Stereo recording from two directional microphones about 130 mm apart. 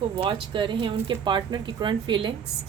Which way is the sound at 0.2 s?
40° right (ahead or behind).